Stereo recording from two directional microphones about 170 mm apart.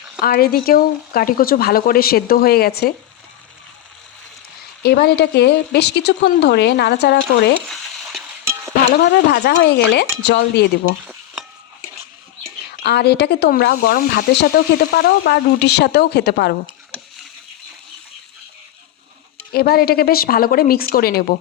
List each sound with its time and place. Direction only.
0.2 s speech: 65° left (ahead or behind)
4.8 s speech: 70° left (ahead or behind)
7.7 s stir: centre (ahead or behind)
9.3 s speech: 85° left
11.0 s stir: 10° right (ahead or behind)
12.6 s speech: 75° left (ahead or behind)
19.5 s speech: 65° left (ahead or behind)